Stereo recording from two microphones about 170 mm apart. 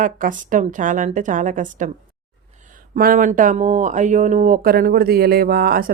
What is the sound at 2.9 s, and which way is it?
Speech, 55° right (ahead or behind).